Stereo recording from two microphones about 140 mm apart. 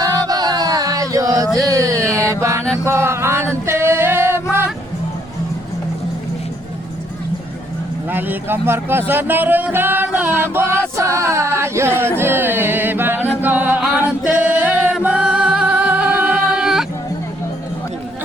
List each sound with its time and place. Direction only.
0.3 s a sound: 30° right (ahead or behind)
1.6 s music: 25° right (ahead or behind)
3.7 s singing: 20° right (ahead or behind)
8.1 s speech: 15° right (ahead or behind)
13.4 s music: 10° right (ahead or behind)
14.1 s singing: 10° right (ahead or behind)